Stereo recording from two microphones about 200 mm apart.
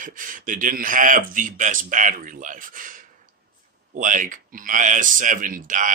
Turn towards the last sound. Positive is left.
turn(degrees=-40)  # may be behind; listen again after turning